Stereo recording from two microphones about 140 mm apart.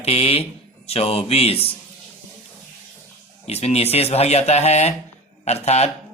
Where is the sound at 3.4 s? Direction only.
50° left (ahead or behind).